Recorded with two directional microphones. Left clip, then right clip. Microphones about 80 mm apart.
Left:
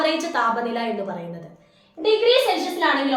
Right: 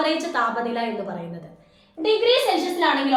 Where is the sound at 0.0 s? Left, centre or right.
Left.